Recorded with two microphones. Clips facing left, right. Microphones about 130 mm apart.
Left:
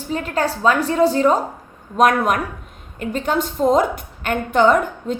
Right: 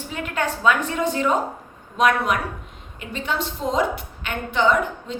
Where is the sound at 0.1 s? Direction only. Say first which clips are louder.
Left 5 dB; 35° left (ahead or behind).